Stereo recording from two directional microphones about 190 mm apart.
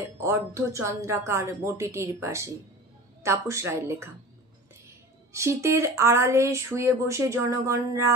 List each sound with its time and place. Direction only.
0.2 s speech: 15° right (ahead or behind)
5.3 s speech: 15° right (ahead or behind)